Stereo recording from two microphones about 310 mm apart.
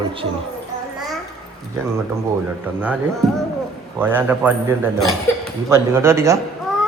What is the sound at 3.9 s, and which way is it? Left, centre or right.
Speech, centre.